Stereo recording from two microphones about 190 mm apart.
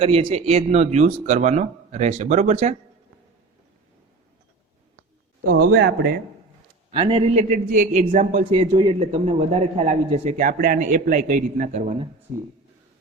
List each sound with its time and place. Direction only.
0.0 s a man's voice: 30° right (ahead or behind)
5.5 s a man's voice: 55° right (ahead or behind)
6.9 s a man's voice: 30° right (ahead or behind)
8.1 s a sound: 45° right (ahead or behind)
8.4 s a man's voice: 25° right (ahead or behind)